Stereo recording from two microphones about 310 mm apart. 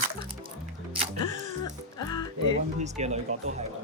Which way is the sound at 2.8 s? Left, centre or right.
Right.